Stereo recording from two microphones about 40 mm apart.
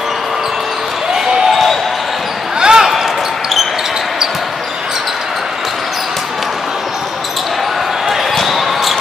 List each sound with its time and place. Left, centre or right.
1.5 s basketball bounce: centre
2.6 s basketball bounce: centre
8.4 s basketball bounce: centre